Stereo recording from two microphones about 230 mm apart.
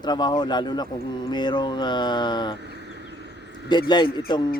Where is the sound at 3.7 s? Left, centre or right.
Centre.